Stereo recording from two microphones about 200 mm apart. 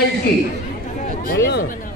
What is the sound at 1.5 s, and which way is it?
Speech, 50° left (ahead or behind).